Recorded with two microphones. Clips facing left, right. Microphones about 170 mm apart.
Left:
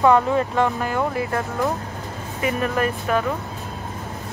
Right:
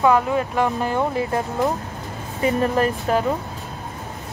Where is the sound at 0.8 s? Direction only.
20° right (ahead or behind).